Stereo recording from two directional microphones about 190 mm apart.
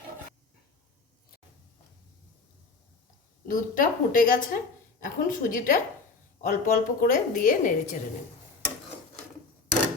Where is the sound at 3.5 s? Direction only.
45° left (ahead or behind).